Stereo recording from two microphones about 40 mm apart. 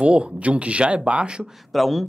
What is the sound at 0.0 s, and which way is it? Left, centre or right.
Speech, right.